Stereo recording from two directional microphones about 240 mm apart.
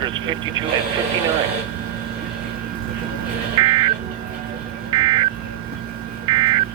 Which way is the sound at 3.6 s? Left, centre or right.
Centre.